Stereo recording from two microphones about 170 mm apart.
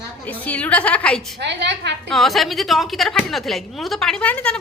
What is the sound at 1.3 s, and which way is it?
Speech, 90° right.